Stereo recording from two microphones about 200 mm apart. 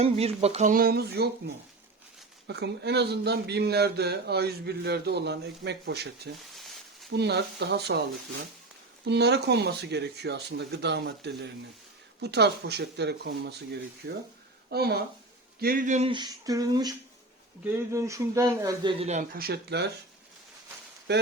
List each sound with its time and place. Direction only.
0.0 s speech: 30° right (ahead or behind); by 6.1 s 55° right (ahead or behind)
6.6 s a sound: centre (ahead or behind)
7.1 s speech: 55° right (ahead or behind)
9.0 s speech: 55° right (ahead or behind)
14.7 s speech: 50° right (ahead or behind)
21.1 s speech: 60° right (ahead or behind)